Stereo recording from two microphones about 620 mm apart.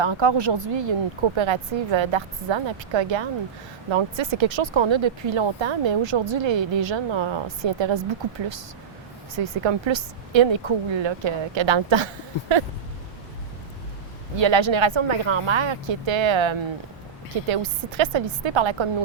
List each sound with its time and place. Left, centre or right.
0.0 s speech: right
9.3 s speech: right
14.3 s speech: right